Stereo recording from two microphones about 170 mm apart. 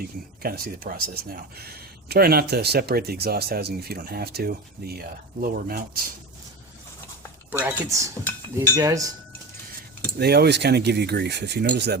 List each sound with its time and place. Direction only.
0.4 s speech: 60° right (ahead or behind)
7.5 s speech: 15° right (ahead or behind)
8.7 s cutlery: 20° right (ahead or behind)
10.2 s speech: 70° right (ahead or behind)